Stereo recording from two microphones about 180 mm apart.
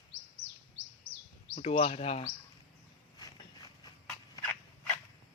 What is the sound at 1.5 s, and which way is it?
Speech, 35° left (ahead or behind).